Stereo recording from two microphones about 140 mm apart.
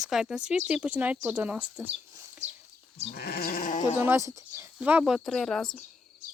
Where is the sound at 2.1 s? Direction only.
20° right (ahead or behind).